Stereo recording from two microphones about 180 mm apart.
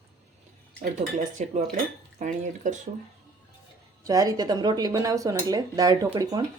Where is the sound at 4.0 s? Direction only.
20° right (ahead or behind).